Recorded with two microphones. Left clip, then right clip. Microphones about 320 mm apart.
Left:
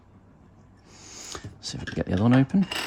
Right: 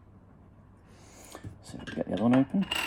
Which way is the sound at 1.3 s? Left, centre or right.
Right.